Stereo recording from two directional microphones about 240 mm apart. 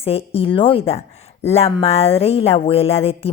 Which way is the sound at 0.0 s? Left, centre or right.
Left.